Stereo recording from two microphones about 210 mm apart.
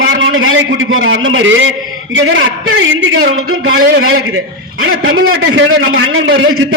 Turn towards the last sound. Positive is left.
turn(degrees=-75)  # may be behind; listen again after turning